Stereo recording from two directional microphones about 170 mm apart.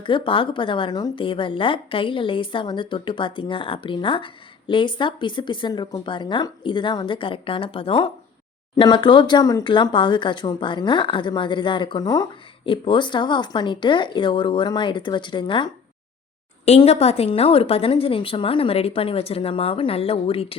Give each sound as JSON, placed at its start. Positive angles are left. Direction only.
{"t": 0.0, "sound": "a woman's voice", "side_deg": 30}